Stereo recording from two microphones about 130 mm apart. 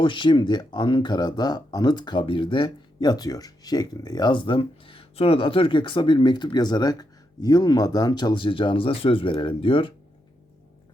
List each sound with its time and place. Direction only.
0.0 s speech: 40° left (ahead or behind)